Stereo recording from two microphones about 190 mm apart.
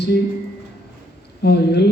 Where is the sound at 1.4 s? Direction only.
60° left (ahead or behind).